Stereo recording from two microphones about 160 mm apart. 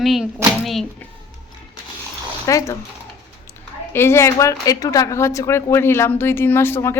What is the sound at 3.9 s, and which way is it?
A woman's voice, 15° left (ahead or behind).